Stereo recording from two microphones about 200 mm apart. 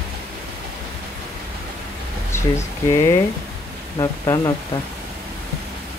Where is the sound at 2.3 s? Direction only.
15° left (ahead or behind).